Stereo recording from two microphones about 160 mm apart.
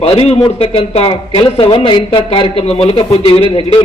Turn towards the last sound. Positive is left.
turn(degrees=35)  # may be behind; listen again after turning